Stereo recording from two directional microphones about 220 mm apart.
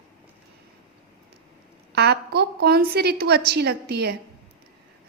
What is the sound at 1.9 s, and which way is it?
A woman's voice, 50° right (ahead or behind).